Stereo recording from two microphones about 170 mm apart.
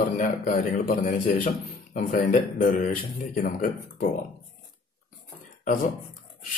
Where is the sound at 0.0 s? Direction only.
45° left (ahead or behind).